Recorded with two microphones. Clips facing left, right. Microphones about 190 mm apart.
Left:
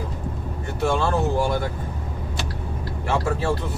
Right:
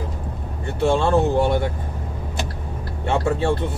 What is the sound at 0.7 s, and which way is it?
Speech, 25° right (ahead or behind).